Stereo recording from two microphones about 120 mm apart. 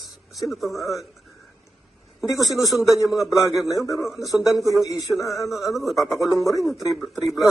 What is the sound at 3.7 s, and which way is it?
Speech, 25° left (ahead or behind).